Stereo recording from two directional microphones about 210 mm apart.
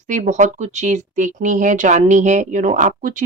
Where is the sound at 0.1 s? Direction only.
35° right (ahead or behind).